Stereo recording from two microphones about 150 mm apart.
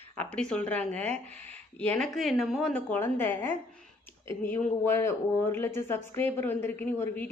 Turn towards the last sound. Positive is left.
turn(degrees=15)  # may be behind; listen again after turning